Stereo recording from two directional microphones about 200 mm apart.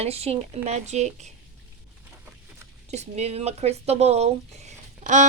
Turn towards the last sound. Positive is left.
turn(degrees=-35)  # may be behind; listen again after turning